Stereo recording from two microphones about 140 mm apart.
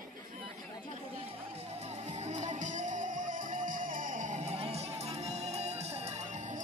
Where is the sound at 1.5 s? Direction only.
50° right (ahead or behind).